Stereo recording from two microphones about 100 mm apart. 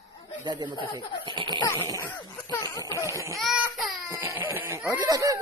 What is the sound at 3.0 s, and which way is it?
Speech, 30° right (ahead or behind).